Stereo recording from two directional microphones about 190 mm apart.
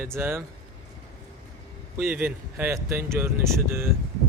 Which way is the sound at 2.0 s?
10° right (ahead or behind).